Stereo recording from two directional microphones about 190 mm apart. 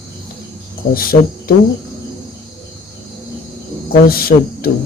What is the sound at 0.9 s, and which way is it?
Speech, 50° left (ahead or behind).